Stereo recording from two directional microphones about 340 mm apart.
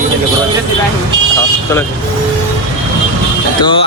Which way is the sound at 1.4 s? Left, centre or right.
Centre.